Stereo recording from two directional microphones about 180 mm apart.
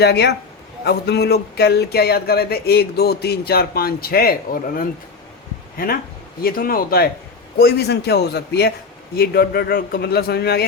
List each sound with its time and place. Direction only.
0.0 s a man's voice: 65° left (ahead or behind)